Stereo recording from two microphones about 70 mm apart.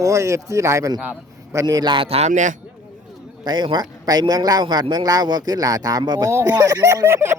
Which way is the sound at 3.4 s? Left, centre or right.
Right.